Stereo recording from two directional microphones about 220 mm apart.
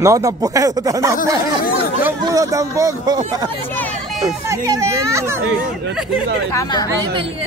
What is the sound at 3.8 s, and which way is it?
Speech, centre (ahead or behind).